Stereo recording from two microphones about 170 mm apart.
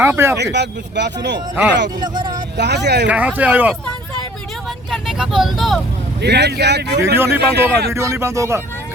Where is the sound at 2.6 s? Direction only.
80° right.